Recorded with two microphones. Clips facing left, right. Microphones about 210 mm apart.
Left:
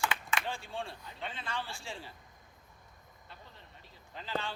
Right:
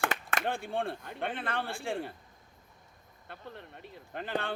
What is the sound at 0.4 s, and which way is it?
A man's voice, 55° right (ahead or behind).